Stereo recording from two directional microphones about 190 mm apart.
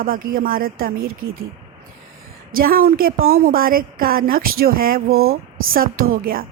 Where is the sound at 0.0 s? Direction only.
50° right (ahead or behind).